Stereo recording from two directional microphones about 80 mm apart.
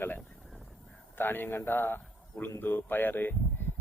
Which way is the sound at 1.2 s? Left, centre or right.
Left.